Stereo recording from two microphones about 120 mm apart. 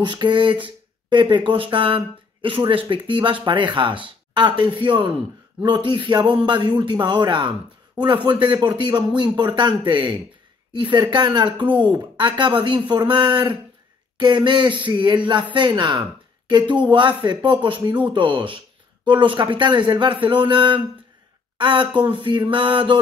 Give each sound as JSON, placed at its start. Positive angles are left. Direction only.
{"t": 0.0, "sound": "speech", "side_deg": -40}